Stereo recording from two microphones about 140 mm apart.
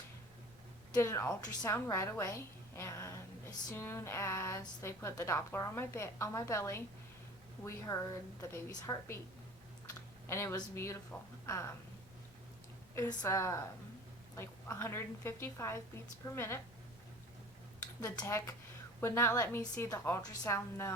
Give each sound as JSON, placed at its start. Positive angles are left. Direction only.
{"t": 0.9, "sound": "a woman's voice", "side_deg": 20}
{"t": 10.2, "sound": "a woman's voice", "side_deg": 20}
{"t": 13.0, "sound": "a woman's voice", "side_deg": 20}
{"t": 18.0, "sound": "a woman's voice", "side_deg": 25}